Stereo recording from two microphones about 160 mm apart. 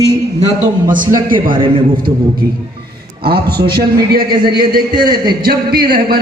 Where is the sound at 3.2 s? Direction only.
75° right (ahead or behind).